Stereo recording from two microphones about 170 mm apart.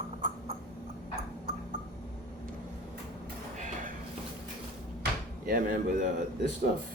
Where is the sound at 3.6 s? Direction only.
45° right (ahead or behind).